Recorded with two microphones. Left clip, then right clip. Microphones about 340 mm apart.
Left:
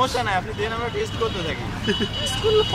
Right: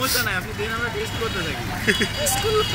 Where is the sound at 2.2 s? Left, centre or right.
Left.